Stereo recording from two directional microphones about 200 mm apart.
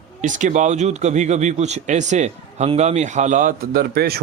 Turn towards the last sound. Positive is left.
turn(degrees=-50)  # may be behind; listen again after turning